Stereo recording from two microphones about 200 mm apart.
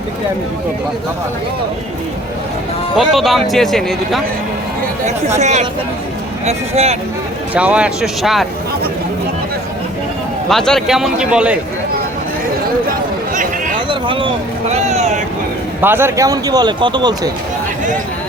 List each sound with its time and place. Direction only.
2.9 s a man's voice: centre (ahead or behind)
5.0 s speech: 35° right (ahead or behind)
7.5 s a man's voice: 5° right (ahead or behind)
10.5 s a man's voice: centre (ahead or behind)
12.9 s a sound: 40° right (ahead or behind)
13.7 s a sound: 25° right (ahead or behind)
15.8 s speech: 10° right (ahead or behind)